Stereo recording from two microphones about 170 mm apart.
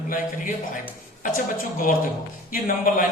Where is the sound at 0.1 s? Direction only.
50° left (ahead or behind).